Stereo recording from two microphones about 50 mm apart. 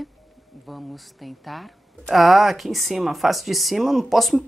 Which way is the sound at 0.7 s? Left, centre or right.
Centre.